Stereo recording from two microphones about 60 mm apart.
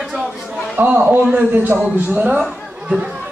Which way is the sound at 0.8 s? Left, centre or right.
Right.